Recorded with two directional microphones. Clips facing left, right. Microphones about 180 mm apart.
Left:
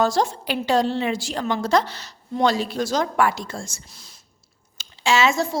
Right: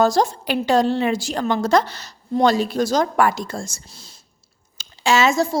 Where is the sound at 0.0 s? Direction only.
40° right (ahead or behind).